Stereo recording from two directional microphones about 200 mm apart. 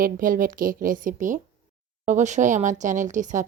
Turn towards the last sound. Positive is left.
turn(degrees=-40)  # may be behind; listen again after turning